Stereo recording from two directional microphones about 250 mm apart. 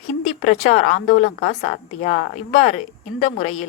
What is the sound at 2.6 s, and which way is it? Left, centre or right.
Speech, left.